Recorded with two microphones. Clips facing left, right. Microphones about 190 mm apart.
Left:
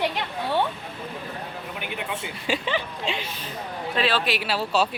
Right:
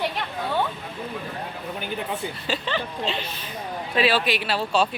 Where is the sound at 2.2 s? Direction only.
15° left (ahead or behind).